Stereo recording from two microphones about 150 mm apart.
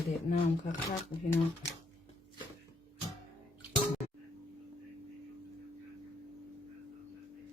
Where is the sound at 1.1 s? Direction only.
15° left (ahead or behind).